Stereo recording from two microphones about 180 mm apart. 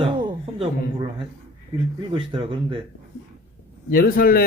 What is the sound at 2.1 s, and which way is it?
Speech, 30° right (ahead or behind).